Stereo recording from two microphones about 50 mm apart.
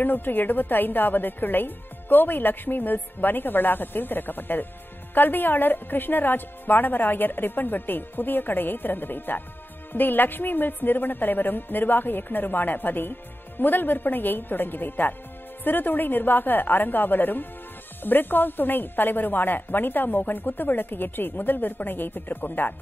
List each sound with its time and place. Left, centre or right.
0.0 s a woman's voice: left